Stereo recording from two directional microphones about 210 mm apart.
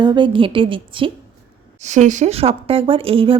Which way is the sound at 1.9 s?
35° right (ahead or behind).